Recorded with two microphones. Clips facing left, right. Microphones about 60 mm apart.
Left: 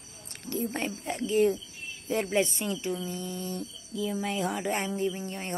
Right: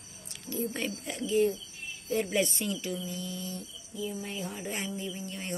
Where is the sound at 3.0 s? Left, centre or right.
Left.